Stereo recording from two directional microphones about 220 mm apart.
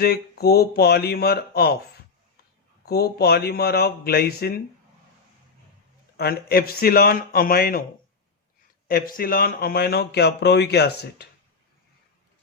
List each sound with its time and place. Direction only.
0.0 s speech: 45° left (ahead or behind)
2.8 s speech: 45° left (ahead or behind)
6.1 s speech: 45° left (ahead or behind)
8.9 s speech: 40° left (ahead or behind)